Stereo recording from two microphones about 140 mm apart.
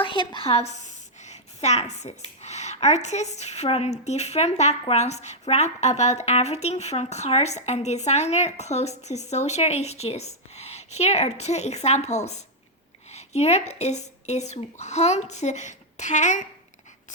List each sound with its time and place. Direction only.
0.0 s a woman's voice: 35° left (ahead or behind); by 16.5 s 60° left (ahead or behind)